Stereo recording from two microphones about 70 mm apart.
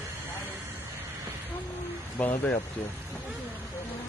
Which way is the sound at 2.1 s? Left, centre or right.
Left.